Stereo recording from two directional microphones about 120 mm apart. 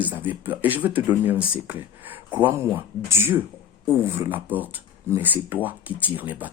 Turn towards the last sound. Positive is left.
turn(degrees=-15)  # may be behind; listen again after turning